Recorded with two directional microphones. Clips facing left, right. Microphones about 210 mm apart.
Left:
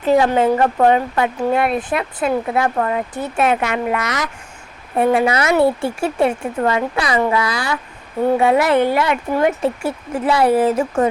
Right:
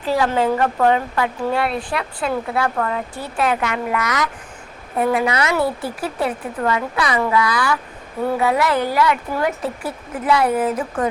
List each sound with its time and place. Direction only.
0.0 s speech: 20° left (ahead or behind)